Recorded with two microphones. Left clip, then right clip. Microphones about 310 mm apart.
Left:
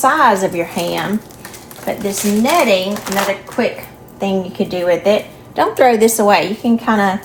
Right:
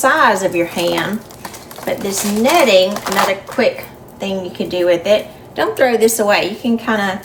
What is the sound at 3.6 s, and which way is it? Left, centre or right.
A woman's voice, centre.